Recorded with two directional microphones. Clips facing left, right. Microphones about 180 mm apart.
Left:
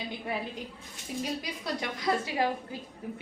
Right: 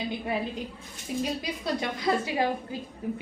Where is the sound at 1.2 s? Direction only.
30° right (ahead or behind).